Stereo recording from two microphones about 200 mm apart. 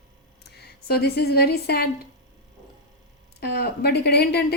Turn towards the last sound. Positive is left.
turn(degrees=55)  # may be behind; listen again after turning